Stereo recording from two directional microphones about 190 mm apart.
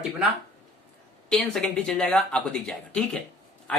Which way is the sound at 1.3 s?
Centre (ahead or behind).